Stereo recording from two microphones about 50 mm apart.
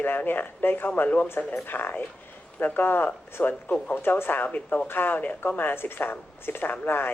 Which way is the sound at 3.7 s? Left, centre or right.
Left.